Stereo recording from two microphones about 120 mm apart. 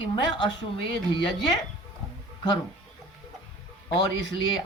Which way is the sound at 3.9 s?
35° left (ahead or behind).